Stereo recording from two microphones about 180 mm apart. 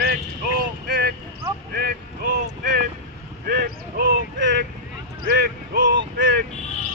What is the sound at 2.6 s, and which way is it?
Vehicle, 55° right (ahead or behind).